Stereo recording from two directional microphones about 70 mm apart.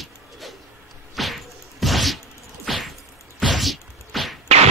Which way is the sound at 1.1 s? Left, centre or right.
Centre.